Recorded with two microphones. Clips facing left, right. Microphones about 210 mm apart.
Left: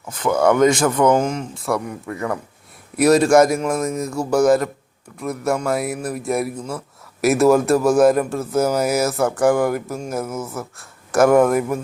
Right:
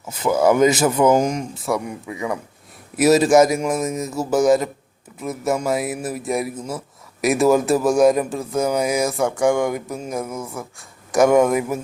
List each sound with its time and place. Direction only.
0.1 s speech: 5° right (ahead or behind)
1.6 s a man's voice: centre (ahead or behind)